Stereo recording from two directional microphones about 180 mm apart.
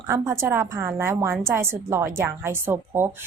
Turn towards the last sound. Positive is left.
turn(degrees=-10)  # may be behind; listen again after turning